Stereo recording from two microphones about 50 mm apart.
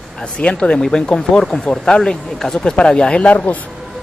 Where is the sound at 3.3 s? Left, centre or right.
Left.